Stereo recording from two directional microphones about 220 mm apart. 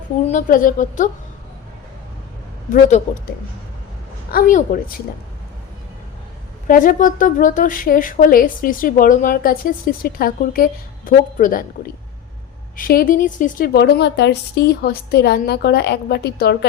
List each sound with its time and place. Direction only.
0.3 s a woman's voice: 35° left (ahead or behind)
4.3 s a woman's voice: 40° left (ahead or behind)
6.7 s a woman's voice: 35° left (ahead or behind)
12.7 s speech: 40° left (ahead or behind)